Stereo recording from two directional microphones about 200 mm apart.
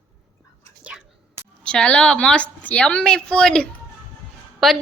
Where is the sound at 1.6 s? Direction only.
5° left (ahead or behind).